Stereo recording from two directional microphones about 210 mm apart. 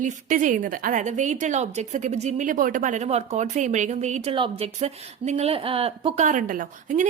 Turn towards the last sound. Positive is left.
turn(degrees=-40)  # may be behind; listen again after turning